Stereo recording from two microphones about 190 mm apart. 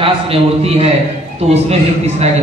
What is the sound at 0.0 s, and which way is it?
A man's voice, 30° right (ahead or behind).